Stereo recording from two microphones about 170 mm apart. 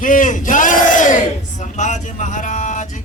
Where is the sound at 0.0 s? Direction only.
50° left (ahead or behind).